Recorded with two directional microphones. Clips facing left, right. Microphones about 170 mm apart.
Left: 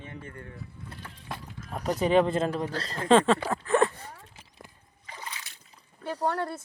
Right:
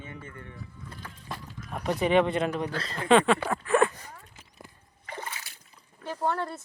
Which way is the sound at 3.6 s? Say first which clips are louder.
Even; 30° left (ahead or behind).